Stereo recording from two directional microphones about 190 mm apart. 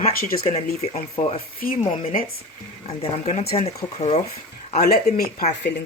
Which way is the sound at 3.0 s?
35° left (ahead or behind).